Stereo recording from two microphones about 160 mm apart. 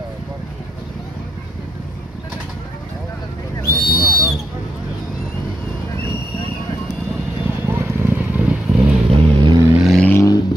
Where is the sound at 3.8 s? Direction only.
70° left (ahead or behind).